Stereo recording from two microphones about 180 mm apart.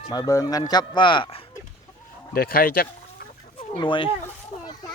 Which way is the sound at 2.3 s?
55° left (ahead or behind).